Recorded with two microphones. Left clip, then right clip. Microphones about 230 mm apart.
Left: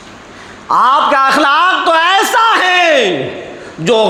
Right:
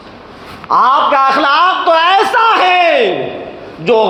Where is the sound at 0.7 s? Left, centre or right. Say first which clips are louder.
Even; left.